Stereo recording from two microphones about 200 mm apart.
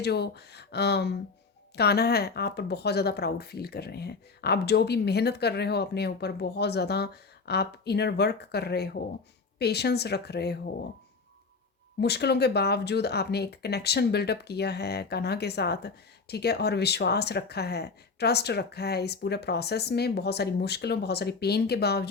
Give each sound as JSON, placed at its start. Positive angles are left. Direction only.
{"t": 0.0, "sound": "speech", "side_deg": 55}
{"t": 11.9, "sound": "speech", "side_deg": 55}